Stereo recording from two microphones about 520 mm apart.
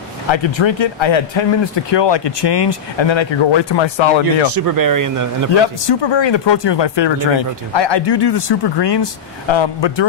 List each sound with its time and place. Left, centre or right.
0.3 s speech: left
4.6 s speech: right
5.6 s speech: left